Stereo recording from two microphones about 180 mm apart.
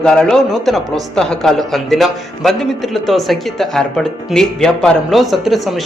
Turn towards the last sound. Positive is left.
turn(degrees=0)  # may be behind; listen again after turning